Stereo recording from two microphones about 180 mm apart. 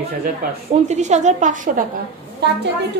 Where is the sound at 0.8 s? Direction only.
40° right (ahead or behind).